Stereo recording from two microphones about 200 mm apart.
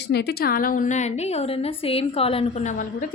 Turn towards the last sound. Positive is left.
turn(degrees=40)  # may be behind; listen again after turning